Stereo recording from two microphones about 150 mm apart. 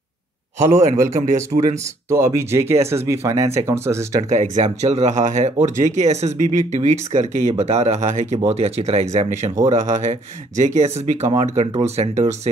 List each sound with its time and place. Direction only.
0.6 s speech: 20° right (ahead or behind)
4.2 s speech: 50° right (ahead or behind)